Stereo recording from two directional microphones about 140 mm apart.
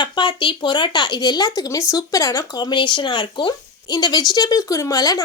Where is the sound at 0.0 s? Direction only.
35° left (ahead or behind).